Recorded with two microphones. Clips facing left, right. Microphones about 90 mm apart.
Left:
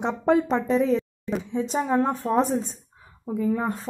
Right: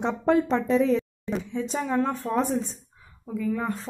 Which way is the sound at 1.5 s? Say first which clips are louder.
Left 4 dB; 35° left (ahead or behind).